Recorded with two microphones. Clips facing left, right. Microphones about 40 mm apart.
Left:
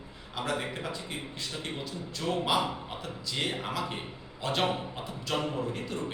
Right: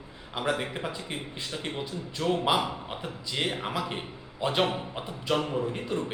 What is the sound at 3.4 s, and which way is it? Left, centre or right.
Mantra, centre.